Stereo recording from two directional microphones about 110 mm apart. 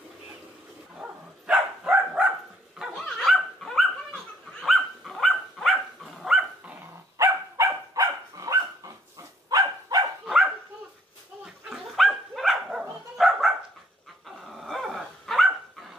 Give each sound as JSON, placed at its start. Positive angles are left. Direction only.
{"t": 1.0, "sound": "dog", "side_deg": -5}
{"t": 1.5, "sound": "a sound", "side_deg": -10}
{"t": 2.8, "sound": "dog", "side_deg": 5}
{"t": 7.2, "sound": "dog", "side_deg": -30}
{"t": 10.2, "sound": "dog", "side_deg": -5}